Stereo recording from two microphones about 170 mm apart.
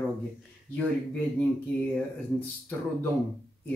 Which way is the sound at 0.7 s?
5° left (ahead or behind).